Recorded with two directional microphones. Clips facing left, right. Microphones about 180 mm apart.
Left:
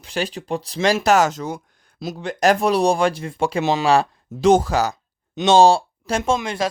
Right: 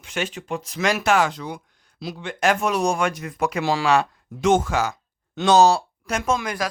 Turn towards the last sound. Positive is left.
turn(degrees=25)  # may be behind; listen again after turning